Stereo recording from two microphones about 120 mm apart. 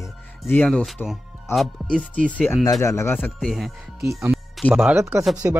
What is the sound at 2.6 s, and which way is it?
Speech, 30° left (ahead or behind).